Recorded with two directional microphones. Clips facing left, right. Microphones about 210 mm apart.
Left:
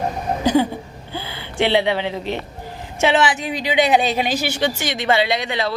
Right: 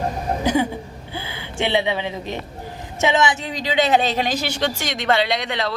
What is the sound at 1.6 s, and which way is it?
Speech, 15° right (ahead or behind).